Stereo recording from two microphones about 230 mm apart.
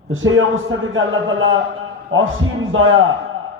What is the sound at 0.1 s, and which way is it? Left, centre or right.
A man's voice, right.